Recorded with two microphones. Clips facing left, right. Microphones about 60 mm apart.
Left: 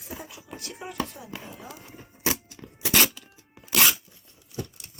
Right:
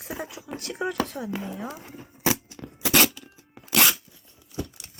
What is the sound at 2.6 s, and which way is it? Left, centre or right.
Music, centre.